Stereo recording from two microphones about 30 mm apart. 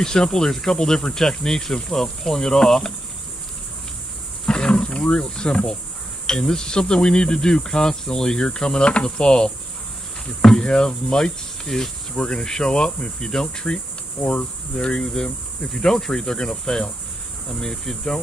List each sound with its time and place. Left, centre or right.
0.0 s insect: centre
4.5 s roaring cats: centre
4.8 s speech: left
6.3 s cricket: centre
8.4 s cricket: left
11.1 s speech: centre
12.4 s insect: centre
14.2 s cricket: left
15.6 s insect: centre
16.2 s cricket: left